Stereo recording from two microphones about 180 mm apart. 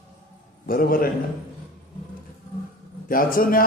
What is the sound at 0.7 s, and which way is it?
Speech, 55° left (ahead or behind).